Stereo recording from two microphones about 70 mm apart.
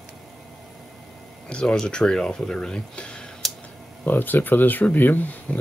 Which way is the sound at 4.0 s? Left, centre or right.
Left.